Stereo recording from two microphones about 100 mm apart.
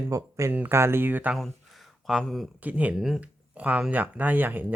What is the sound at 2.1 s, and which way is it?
Speech, centre (ahead or behind).